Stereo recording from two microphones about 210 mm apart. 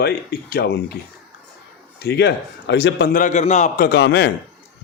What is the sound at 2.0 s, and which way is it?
Speech, 50° left (ahead or behind).